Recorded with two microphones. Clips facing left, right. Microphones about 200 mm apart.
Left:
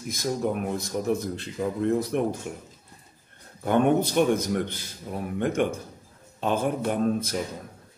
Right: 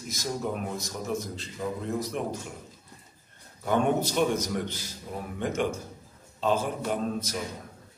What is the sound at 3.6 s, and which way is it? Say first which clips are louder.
Speech: left 4 dB; 55° left (ahead or behind).